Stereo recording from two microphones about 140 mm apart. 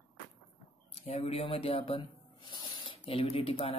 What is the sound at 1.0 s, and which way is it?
Speech, 45° left (ahead or behind).